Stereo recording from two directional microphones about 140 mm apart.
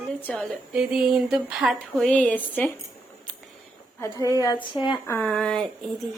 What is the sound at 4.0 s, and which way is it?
A woman's voice, 25° left (ahead or behind).